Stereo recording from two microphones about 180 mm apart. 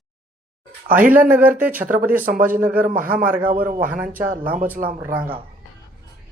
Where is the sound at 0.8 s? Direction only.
50° right (ahead or behind).